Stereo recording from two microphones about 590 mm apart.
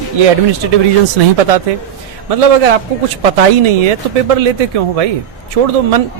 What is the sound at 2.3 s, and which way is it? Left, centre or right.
A man's voice, right.